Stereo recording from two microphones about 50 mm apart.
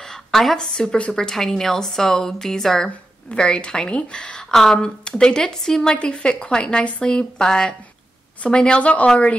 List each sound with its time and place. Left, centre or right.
0.3 s a woman's voice: centre; by 9.1 s left